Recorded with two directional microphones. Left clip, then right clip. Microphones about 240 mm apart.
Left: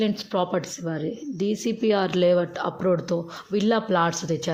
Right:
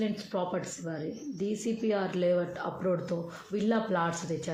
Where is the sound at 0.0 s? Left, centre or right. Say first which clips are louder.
Left 8 dB; left.